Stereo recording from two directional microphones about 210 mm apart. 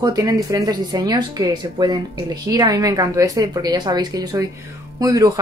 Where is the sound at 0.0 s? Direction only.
15° right (ahead or behind).